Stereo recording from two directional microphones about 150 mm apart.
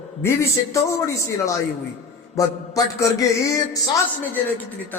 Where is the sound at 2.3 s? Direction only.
25° left (ahead or behind).